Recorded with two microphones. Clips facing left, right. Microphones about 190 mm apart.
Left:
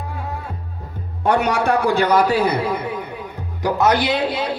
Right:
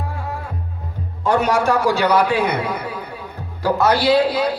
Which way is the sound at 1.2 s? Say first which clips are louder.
Right 1 dB; 65° left (ahead or behind).